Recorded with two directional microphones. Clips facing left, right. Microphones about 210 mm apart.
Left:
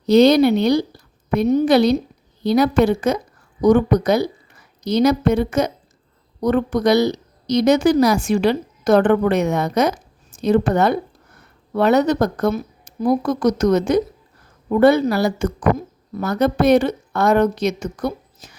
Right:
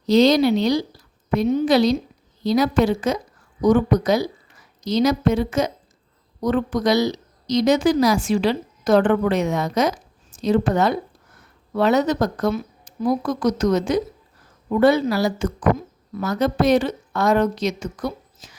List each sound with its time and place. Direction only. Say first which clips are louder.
0.0 s a woman's voice: left 3 dB; 60° left (ahead or behind)
1.6 s a woman's voice: left 2 dB; 60° left (ahead or behind)
12.5 s a sound: left 2 dB; 40° left (ahead or behind)
13.2 s a woman's voice: left 3 dB; 60° left (ahead or behind)